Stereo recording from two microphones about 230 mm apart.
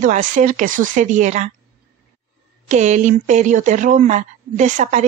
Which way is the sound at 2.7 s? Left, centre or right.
Right.